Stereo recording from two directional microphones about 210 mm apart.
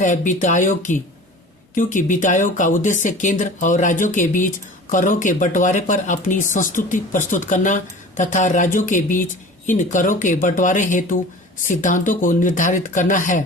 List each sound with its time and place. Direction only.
0.0 s speech: 35° left (ahead or behind)